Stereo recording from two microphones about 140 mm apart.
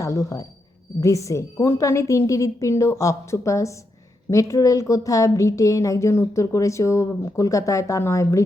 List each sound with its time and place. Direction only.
0.0 s a woman's voice: 20° left (ahead or behind)